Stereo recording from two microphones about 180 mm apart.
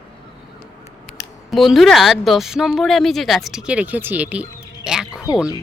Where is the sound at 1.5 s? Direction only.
Centre (ahead or behind).